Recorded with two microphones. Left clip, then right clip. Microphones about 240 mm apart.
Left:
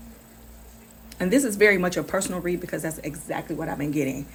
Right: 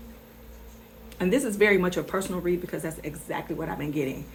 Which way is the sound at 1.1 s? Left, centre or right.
Left.